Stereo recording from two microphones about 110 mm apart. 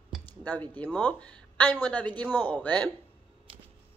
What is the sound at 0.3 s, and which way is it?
Speech, 15° left (ahead or behind).